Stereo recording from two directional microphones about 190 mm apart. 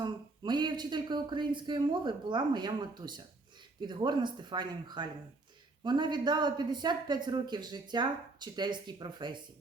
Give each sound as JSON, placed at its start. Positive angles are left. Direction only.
{"t": 0.0, "sound": "speech", "side_deg": -25}